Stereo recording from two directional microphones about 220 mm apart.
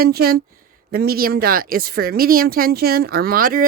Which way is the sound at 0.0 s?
45° right (ahead or behind).